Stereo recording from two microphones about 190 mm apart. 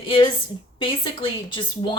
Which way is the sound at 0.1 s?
25° left (ahead or behind).